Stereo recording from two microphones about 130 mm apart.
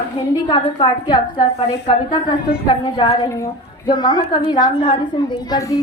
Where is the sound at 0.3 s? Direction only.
30° left (ahead or behind).